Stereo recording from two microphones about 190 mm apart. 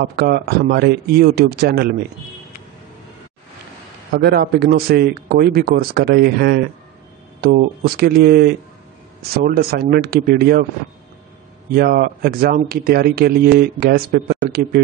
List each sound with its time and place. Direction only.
0.0 s speech: 60° right (ahead or behind)
4.1 s speech: 55° right (ahead or behind)
11.7 s speech: 55° right (ahead or behind)